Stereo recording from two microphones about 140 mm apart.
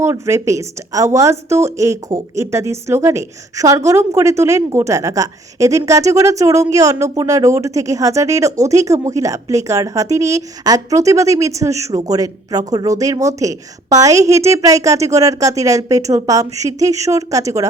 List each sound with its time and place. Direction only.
0.0 s a woman's voice: 20° right (ahead or behind)